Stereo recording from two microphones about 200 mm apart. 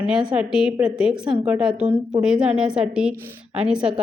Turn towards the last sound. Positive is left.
turn(degrees=-5)  # may be behind; listen again after turning